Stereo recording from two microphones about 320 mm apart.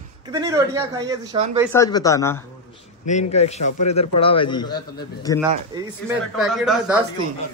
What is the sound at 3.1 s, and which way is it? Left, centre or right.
A man's voice, left.